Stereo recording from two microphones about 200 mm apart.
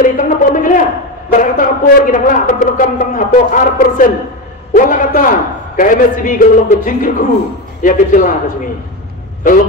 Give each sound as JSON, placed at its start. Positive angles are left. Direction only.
{"t": 0.0, "sound": "music", "side_deg": 40}
{"t": 1.3, "sound": "speech", "side_deg": 40}